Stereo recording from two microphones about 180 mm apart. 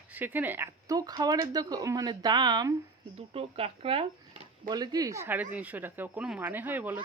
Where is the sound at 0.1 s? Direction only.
10° right (ahead or behind).